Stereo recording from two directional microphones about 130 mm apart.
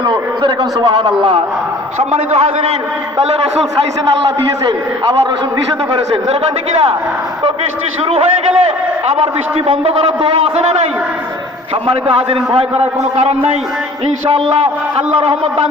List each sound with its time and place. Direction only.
0.0 s a man's voice: 35° right (ahead or behind)
2.0 s a man's voice: 55° right (ahead or behind)
4.0 s a man's voice: 40° right (ahead or behind)
6.2 s a man's voice: 50° right (ahead or behind)
11.9 s a man's voice: 45° right (ahead or behind)
14.3 s a man's voice: 45° right (ahead or behind)